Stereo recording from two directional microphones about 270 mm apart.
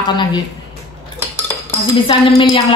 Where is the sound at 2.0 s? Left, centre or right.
Centre.